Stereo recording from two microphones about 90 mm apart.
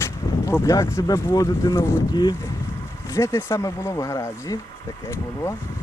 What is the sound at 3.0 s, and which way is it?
Speech, 35° left (ahead or behind).